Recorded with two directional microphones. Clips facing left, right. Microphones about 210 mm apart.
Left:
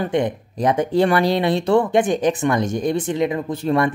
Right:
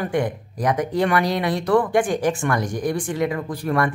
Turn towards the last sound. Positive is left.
turn(degrees=25)  # may be behind; listen again after turning